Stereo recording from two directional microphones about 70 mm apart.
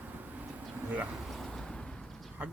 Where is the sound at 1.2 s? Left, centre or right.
Centre.